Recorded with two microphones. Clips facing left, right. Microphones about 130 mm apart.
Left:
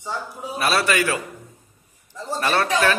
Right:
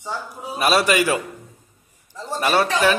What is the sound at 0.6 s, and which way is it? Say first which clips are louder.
Speech: right 3 dB; 15° right (ahead or behind).